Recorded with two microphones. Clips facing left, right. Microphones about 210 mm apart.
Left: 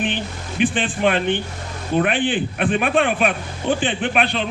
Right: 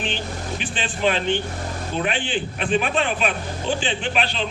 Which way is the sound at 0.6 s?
55° left (ahead or behind).